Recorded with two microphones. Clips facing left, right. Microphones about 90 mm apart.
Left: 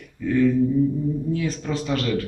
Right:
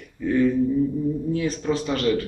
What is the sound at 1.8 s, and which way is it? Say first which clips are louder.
Speech: right 1 dB; 5° right (ahead or behind).